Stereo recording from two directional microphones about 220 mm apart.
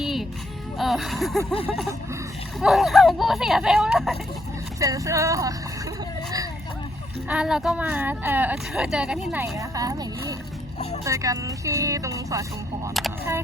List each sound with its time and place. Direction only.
0.0 s music: centre (ahead or behind)
0.8 s speech: centre (ahead or behind)
2.6 s speech: centre (ahead or behind)
4.8 s speech: 15° right (ahead or behind)
7.3 s speech: 5° right (ahead or behind)
12.9 s speech: centre (ahead or behind)